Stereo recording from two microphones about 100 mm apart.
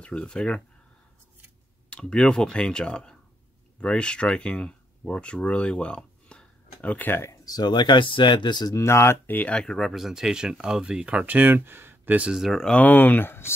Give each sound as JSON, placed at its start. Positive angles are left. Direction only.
{"t": 0.0, "sound": "speech", "side_deg": 10}
{"t": 1.9, "sound": "speech", "side_deg": 10}
{"t": 7.4, "sound": "speech", "side_deg": 45}
{"t": 8.7, "sound": "speech", "side_deg": 30}
{"t": 12.4, "sound": "speech", "side_deg": 0}